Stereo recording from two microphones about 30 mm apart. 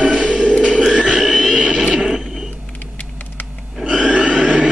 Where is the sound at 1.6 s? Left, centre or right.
Centre.